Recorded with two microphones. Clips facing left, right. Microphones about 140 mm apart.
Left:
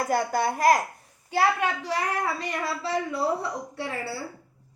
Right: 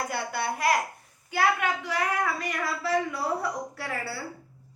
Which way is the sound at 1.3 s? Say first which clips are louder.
Left 2 dB; 30° left (ahead or behind).